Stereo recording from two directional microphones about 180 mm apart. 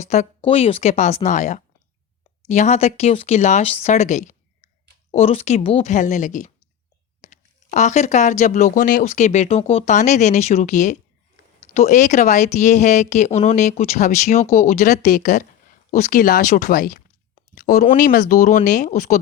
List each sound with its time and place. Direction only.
0.0 s speech: 40° left (ahead or behind)